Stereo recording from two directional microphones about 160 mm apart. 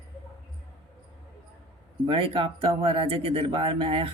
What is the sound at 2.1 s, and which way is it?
Speech, 35° right (ahead or behind).